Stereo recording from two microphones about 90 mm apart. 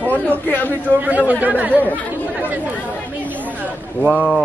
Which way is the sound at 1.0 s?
15° right (ahead or behind).